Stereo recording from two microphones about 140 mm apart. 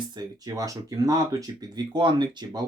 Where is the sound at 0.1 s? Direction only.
30° right (ahead or behind).